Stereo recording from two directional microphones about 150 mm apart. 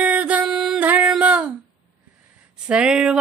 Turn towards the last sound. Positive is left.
turn(degrees=-5)  # may be behind; listen again after turning